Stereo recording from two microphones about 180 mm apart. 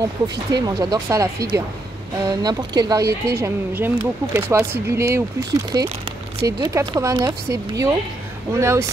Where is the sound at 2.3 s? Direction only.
20° right (ahead or behind).